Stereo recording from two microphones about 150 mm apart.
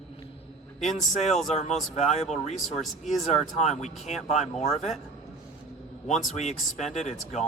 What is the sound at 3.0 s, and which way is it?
Speech, 50° left (ahead or behind).